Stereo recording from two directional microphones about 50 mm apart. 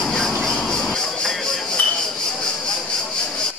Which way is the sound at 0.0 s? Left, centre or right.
Centre.